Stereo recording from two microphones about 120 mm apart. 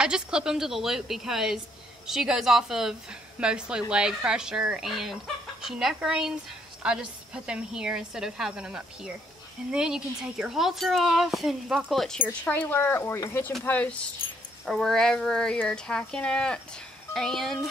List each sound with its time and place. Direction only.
0.0 s a woman's voice: 5° right (ahead or behind)
12.2 s a woman's voice: 10° left (ahead or behind)